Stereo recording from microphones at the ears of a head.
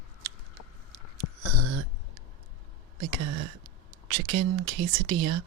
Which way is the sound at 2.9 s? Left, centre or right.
Right.